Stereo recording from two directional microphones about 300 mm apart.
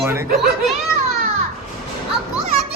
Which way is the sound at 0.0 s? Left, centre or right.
Centre.